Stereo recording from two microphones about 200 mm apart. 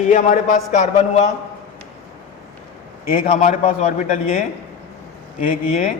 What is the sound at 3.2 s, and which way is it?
A man's voice, 35° left (ahead or behind).